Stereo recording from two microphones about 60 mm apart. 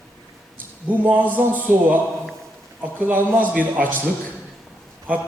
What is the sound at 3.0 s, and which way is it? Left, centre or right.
Speech, right.